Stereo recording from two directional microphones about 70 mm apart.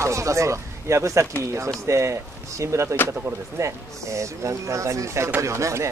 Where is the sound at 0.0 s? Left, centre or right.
Right.